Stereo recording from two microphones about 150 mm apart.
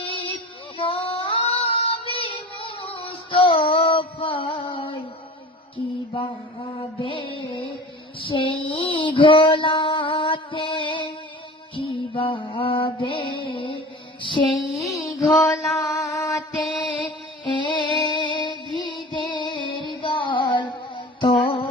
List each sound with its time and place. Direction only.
0.0 s child singing: 35° left (ahead or behind)
0.8 s female singing: 35° left (ahead or behind)
5.7 s music: 30° left (ahead or behind)
8.2 s female singing: 35° left (ahead or behind)
11.8 s mantra: 35° left (ahead or behind)
14.8 s music: centre (ahead or behind)
16.0 s mantra: 20° left (ahead or behind)
17.4 s music: 30° left (ahead or behind)